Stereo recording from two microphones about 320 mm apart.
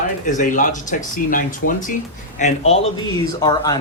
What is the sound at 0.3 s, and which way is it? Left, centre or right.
Speech, left.